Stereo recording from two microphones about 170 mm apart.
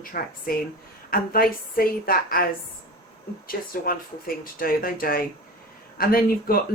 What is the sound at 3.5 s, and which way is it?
Speech, 60° left (ahead or behind).